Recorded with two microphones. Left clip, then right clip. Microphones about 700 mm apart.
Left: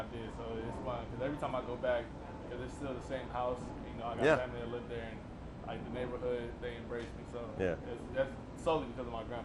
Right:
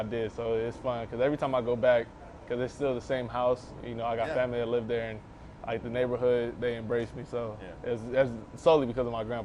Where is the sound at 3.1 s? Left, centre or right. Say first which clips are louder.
Right 7 dB; right.